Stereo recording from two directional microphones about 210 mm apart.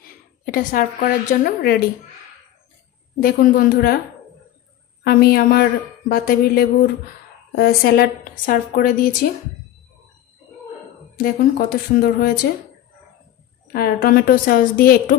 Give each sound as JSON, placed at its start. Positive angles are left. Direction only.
{"t": 0.5, "sound": "a woman's voice", "side_deg": 40}
{"t": 3.2, "sound": "a woman's voice", "side_deg": 45}
{"t": 5.0, "sound": "a woman's voice", "side_deg": 45}
{"t": 11.1, "sound": "a woman's voice", "side_deg": 45}
{"t": 13.7, "sound": "a woman's voice", "side_deg": 45}